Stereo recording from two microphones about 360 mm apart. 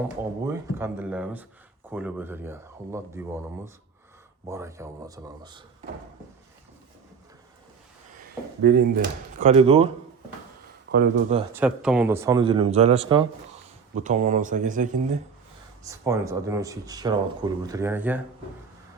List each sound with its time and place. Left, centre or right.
0.0 s speech: centre
9.4 s speech: centre
10.9 s speech: right
11.5 s speech: centre; by 15.2 s right
15.8 s speech: centre